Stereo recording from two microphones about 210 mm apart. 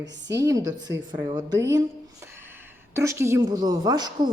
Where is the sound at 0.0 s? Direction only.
15° right (ahead or behind).